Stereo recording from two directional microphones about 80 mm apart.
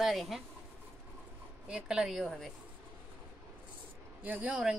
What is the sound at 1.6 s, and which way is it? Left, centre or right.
Speech, centre.